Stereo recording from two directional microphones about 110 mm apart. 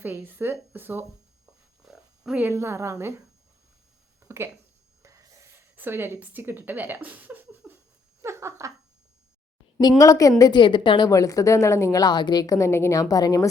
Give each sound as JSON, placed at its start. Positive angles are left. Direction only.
{"t": 0.0, "sound": "speech", "side_deg": -15}
{"t": 1.8, "sound": "oink", "side_deg": -5}
{"t": 2.5, "sound": "speech", "side_deg": -25}
{"t": 4.2, "sound": "a sound", "side_deg": -25}
{"t": 5.7, "sound": "speech", "side_deg": -20}
{"t": 7.6, "sound": "a sound", "side_deg": -10}
{"t": 8.2, "sound": "a sound", "side_deg": -25}
{"t": 10.0, "sound": "a woman's voice", "side_deg": 30}
{"t": 10.6, "sound": "a woman's voice", "side_deg": 45}
{"t": 11.1, "sound": "a woman's voice", "side_deg": 30}